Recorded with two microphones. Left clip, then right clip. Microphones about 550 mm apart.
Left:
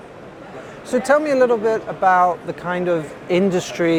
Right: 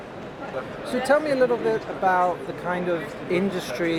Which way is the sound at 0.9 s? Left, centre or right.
Left.